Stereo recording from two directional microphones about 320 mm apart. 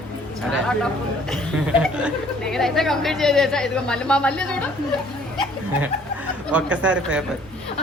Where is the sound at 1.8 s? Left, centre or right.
Centre.